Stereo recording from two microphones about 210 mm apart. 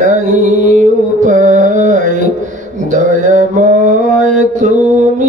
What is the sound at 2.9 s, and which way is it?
Mantra, 35° right (ahead or behind).